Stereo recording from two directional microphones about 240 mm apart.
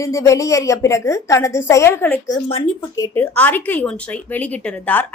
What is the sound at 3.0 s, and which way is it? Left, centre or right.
A woman's voice, centre.